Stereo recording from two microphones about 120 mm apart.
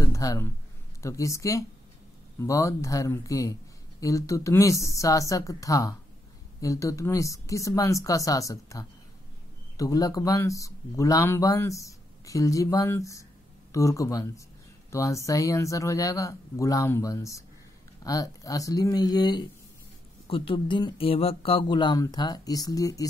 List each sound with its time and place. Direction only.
0.0 s a sound: 30° left (ahead or behind)
1.0 s speech: 25° left (ahead or behind)
20.2 s speech: 50° left (ahead or behind); by 23.0 s 30° left (ahead or behind)